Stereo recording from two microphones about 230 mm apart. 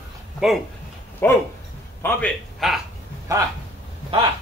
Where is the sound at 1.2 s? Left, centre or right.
Centre.